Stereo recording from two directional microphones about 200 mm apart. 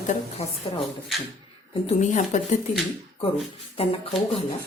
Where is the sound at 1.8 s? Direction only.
40° left (ahead or behind).